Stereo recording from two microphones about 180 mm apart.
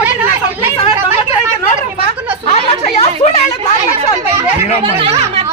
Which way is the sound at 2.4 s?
35° left (ahead or behind).